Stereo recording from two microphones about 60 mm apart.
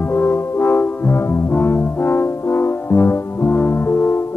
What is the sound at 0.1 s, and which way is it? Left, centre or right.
Brass instrument, left.